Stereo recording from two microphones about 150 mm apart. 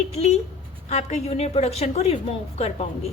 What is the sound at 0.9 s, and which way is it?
A woman's voice, 50° left (ahead or behind).